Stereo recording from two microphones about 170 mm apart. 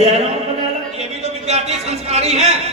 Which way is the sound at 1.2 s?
40° right (ahead or behind).